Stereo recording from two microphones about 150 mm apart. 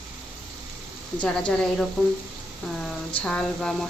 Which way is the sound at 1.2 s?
5° left (ahead or behind).